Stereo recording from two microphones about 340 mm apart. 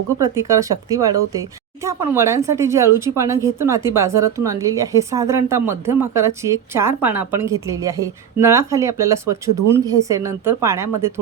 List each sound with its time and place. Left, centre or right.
0.2 s speech: centre